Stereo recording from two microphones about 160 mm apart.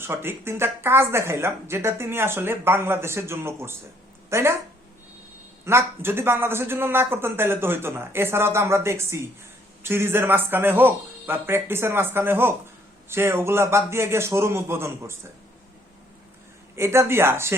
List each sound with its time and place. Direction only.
0.0 s speech: 15° right (ahead or behind)
5.6 s speech: 15° right (ahead or behind)
16.7 s speech: 15° right (ahead or behind)